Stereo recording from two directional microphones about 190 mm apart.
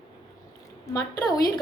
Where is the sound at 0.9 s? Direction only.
20° left (ahead or behind).